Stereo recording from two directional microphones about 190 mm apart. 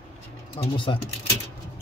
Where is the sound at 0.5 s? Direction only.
25° left (ahead or behind).